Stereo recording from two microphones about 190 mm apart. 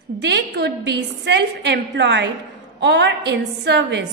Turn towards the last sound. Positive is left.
turn(degrees=-70)  # may be behind; listen again after turning